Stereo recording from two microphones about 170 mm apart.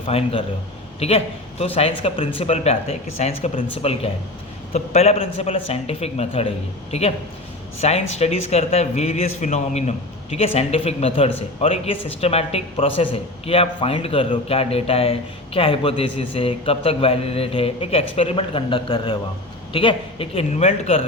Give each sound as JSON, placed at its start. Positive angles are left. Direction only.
{"t": 0.1, "sound": "speech", "side_deg": 35}